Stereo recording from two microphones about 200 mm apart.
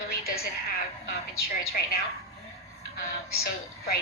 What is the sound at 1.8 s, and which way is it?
Speech, 50° left (ahead or behind).